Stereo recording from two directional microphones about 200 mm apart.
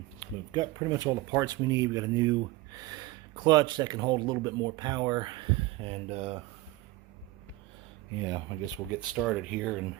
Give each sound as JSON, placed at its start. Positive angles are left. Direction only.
{"t": 0.2, "sound": "speech", "side_deg": -20}
{"t": 3.4, "sound": "speech", "side_deg": -20}
{"t": 8.2, "sound": "speech", "side_deg": -20}
{"t": 8.9, "sound": "speech", "side_deg": -5}